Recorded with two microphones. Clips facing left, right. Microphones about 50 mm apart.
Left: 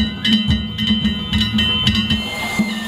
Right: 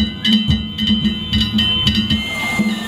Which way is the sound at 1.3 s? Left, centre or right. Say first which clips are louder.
Even; centre.